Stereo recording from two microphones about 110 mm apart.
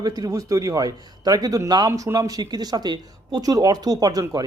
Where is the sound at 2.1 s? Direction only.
35° right (ahead or behind).